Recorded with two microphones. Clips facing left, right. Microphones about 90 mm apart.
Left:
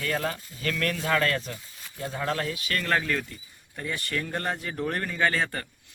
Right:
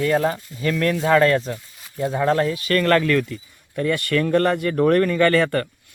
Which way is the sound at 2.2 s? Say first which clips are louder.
Right 10 dB; 35° right (ahead or behind).